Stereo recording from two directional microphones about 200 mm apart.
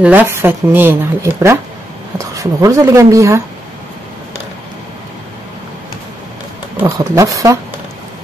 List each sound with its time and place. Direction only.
0.0 s speech: 10° right (ahead or behind)
6.8 s speech: 15° right (ahead or behind)